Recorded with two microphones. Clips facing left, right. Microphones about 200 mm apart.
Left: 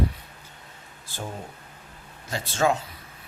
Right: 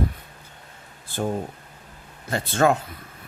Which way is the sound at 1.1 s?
55° right (ahead or behind).